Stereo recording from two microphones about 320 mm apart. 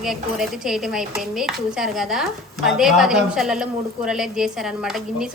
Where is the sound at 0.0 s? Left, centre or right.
Centre.